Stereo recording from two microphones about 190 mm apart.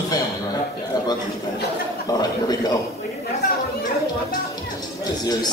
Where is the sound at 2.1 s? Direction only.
20° left (ahead or behind).